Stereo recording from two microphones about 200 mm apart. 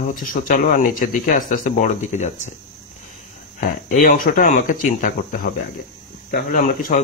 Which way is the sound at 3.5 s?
45° left (ahead or behind).